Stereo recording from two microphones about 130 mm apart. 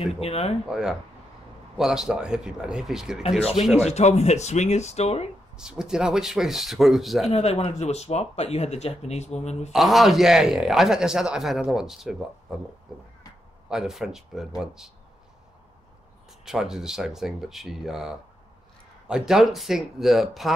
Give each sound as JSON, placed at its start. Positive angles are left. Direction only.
{"t": 0.0, "sound": "speech", "side_deg": 50}
{"t": 0.7, "sound": "a man's voice", "side_deg": -5}
{"t": 3.2, "sound": "speech", "side_deg": 55}
{"t": 5.6, "sound": "a man's voice", "side_deg": -5}
{"t": 7.2, "sound": "speech", "side_deg": 50}
{"t": 9.7, "sound": "a man's voice", "side_deg": 0}
{"t": 13.7, "sound": "a man's voice", "side_deg": -5}
{"t": 16.4, "sound": "a man's voice", "side_deg": -5}